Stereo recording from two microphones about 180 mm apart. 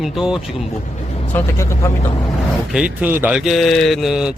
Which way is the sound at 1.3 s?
15° left (ahead or behind).